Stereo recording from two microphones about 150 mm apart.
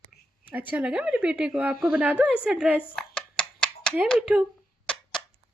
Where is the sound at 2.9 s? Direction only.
5° left (ahead or behind).